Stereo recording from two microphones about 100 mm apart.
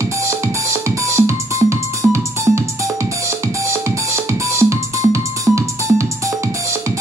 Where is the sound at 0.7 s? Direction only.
30° right (ahead or behind).